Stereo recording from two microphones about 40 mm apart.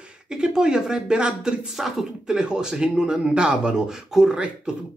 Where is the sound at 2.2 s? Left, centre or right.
Centre.